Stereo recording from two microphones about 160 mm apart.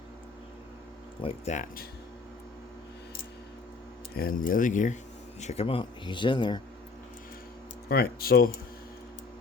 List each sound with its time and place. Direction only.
1.2 s speech: 35° left (ahead or behind)
1.5 s speech: 65° left (ahead or behind)
4.1 s speech: 70° left (ahead or behind); by 6.6 s 30° left (ahead or behind)
7.9 s speech: 70° left (ahead or behind)